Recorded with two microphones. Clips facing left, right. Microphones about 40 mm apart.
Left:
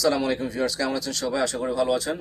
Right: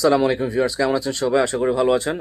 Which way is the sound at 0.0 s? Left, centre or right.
Right.